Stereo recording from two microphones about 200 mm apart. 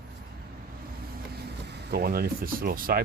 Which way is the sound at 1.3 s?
55° right (ahead or behind).